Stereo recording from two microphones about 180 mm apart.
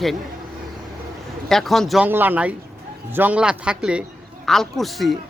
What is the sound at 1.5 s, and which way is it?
Speech, centre (ahead or behind).